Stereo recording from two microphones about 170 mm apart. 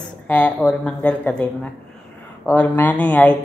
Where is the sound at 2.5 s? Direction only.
10° left (ahead or behind).